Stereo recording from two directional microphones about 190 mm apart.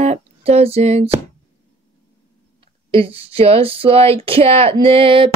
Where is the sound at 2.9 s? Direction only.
30° right (ahead or behind).